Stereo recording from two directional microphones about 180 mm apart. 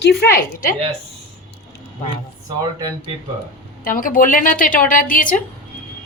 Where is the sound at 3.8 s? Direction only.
50° left (ahead or behind).